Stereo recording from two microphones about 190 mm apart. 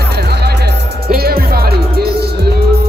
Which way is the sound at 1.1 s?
50° right (ahead or behind).